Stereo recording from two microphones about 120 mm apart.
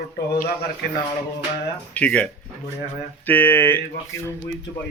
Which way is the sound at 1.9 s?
10° left (ahead or behind).